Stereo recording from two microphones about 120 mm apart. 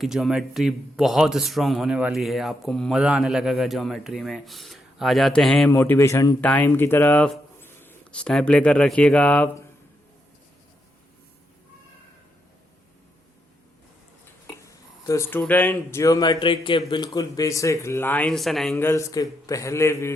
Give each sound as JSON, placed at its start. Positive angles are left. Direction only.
{"t": 0.0, "sound": "a man's voice", "side_deg": -5}
{"t": 5.7, "sound": "a man's voice", "side_deg": 20}
{"t": 6.4, "sound": "speech", "side_deg": 15}
{"t": 14.4, "sound": "a sound", "side_deg": 25}
{"t": 15.3, "sound": "speech", "side_deg": 15}
{"t": 16.0, "sound": "a man's voice", "side_deg": 30}
{"t": 17.1, "sound": "a man's voice", "side_deg": 30}
{"t": 18.3, "sound": "a man's voice", "side_deg": 0}
{"t": 18.8, "sound": "a man's voice", "side_deg": 25}